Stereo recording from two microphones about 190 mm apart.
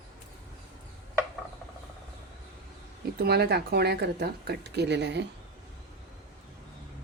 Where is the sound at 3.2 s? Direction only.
60° right (ahead or behind).